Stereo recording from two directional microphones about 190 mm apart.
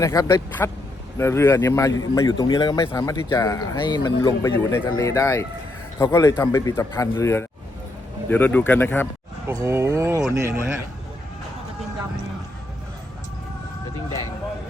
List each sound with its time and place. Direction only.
0.0 s a man's voice: 20° left (ahead or behind)
9.5 s speech: 15° right (ahead or behind)